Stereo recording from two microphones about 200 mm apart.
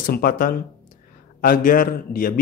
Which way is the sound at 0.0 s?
45° left (ahead or behind).